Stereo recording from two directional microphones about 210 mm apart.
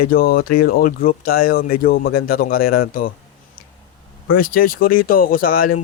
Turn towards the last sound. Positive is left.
turn(degrees=40)  # may be behind; listen again after turning